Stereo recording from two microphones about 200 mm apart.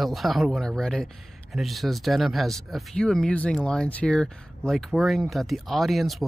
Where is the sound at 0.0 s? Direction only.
Centre (ahead or behind).